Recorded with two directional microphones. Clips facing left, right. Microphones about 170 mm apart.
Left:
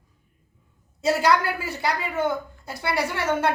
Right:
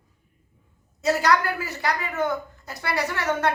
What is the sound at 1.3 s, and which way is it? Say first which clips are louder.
A woman's voice: left 1 dB; 30° left (ahead or behind).